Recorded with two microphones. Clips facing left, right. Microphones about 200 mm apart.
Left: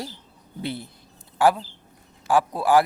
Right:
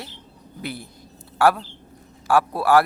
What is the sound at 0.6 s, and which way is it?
Speech, 25° left (ahead or behind).